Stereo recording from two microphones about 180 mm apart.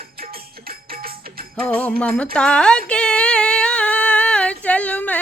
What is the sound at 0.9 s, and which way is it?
Music, 55° right (ahead or behind).